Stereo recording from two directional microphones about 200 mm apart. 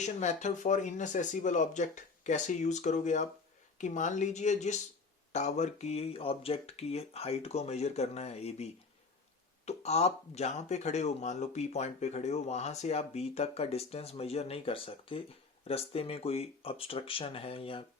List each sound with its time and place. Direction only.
0.0 s speech: 35° left (ahead or behind)